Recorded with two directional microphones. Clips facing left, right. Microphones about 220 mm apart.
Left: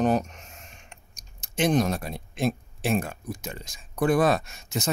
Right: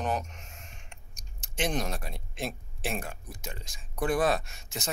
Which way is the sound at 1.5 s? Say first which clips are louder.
Left 8 dB; 40° left (ahead or behind).